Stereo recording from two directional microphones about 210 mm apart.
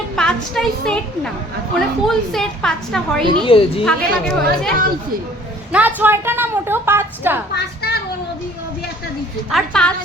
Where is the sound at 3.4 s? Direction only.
25° left (ahead or behind).